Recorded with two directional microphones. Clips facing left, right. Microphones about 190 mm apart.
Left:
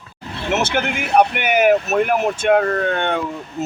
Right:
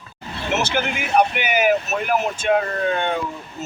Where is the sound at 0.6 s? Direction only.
60° left (ahead or behind).